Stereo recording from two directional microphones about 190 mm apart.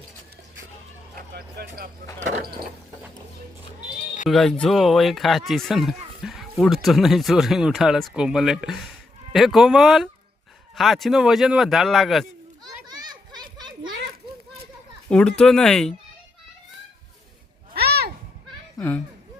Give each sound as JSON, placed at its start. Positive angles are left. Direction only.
{"t": 1.3, "sound": "a sound", "side_deg": -55}
{"t": 2.1, "sound": "a sound", "side_deg": -40}
{"t": 4.3, "sound": "speech", "side_deg": 0}
{"t": 6.2, "sound": "bow-wow", "side_deg": 0}
{"t": 6.8, "sound": "speech", "side_deg": 0}
{"t": 12.6, "sound": "children playing", "side_deg": -20}
{"t": 15.1, "sound": "speech", "side_deg": 5}
{"t": 17.7, "sound": "a sound", "side_deg": -55}
{"t": 18.8, "sound": "a child's voice", "side_deg": 10}